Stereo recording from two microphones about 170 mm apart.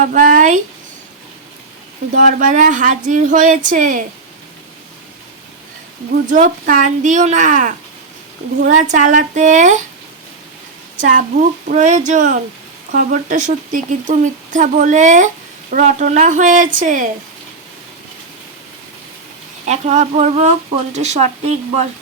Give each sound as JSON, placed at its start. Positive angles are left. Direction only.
{"t": 0.0, "sound": "speech", "side_deg": -55}
{"t": 2.1, "sound": "speech", "side_deg": -55}
{"t": 6.2, "sound": "speech", "side_deg": -50}
{"t": 10.9, "sound": "speech", "side_deg": -50}
{"t": 19.6, "sound": "speech", "side_deg": -40}